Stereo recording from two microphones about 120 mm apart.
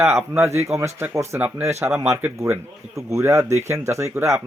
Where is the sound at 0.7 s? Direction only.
25° right (ahead or behind).